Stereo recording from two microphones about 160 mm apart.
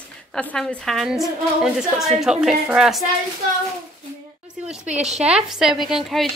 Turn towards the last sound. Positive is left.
turn(degrees=0)  # may be behind; listen again after turning